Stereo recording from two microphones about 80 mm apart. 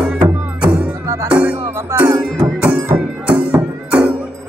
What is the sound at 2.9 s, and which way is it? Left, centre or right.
Music, centre.